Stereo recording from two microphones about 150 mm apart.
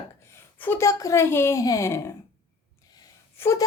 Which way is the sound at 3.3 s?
20° left (ahead or behind).